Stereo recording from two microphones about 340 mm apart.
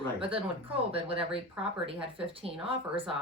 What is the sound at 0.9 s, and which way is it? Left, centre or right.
Speech, centre.